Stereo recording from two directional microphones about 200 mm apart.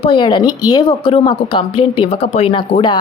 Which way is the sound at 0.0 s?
25° left (ahead or behind).